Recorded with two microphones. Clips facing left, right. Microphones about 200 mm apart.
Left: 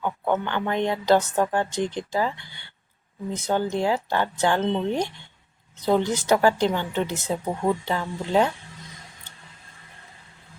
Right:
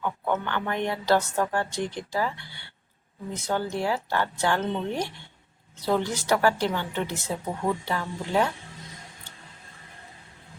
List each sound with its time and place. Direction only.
0.0 s speech: 20° left (ahead or behind)